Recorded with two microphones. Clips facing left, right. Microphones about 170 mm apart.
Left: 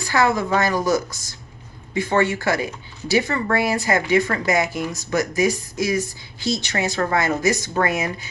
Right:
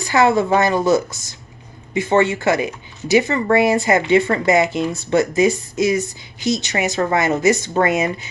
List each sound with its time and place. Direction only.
0.0 s speech: 20° right (ahead or behind)